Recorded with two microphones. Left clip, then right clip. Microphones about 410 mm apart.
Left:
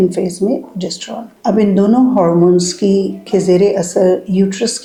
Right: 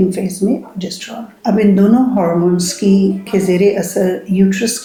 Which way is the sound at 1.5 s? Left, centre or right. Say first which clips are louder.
Even; left.